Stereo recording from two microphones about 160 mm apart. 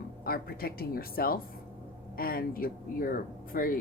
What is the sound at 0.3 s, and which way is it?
A woman's voice, 70° left (ahead or behind).